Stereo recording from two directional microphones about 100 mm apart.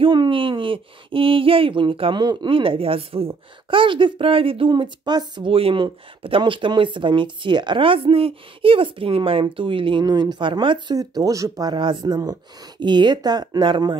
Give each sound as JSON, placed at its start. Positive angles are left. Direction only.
{"t": 0.0, "sound": "speech", "side_deg": -55}
{"t": 11.0, "sound": "speech", "side_deg": -35}